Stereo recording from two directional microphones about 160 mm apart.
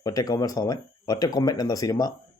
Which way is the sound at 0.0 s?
25° left (ahead or behind).